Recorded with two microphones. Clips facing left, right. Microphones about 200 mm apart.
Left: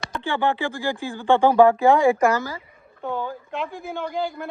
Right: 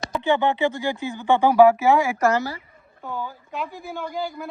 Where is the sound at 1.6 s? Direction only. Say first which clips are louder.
Left 1 dB; centre (ahead or behind).